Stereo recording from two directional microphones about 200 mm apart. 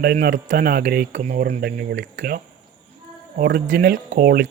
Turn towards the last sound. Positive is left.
turn(degrees=-45)  # may be behind; listen again after turning